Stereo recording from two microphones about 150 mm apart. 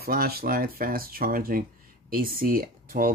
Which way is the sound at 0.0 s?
85° right.